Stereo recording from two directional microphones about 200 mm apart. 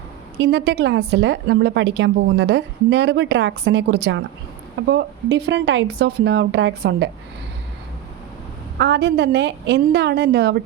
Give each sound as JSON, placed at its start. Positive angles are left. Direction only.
{"t": 0.3, "sound": "a woman's voice", "side_deg": -55}
{"t": 8.8, "sound": "a woman's voice", "side_deg": -60}